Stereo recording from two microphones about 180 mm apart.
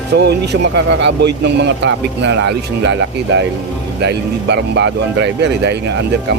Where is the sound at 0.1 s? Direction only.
70° right (ahead or behind).